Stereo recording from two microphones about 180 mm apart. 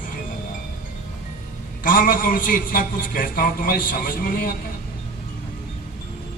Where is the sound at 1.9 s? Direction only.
50° left (ahead or behind).